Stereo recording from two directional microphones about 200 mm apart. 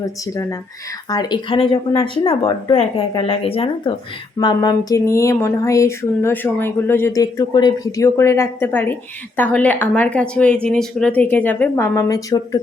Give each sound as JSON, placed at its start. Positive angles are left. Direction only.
{"t": 1.1, "sound": "speech", "side_deg": 20}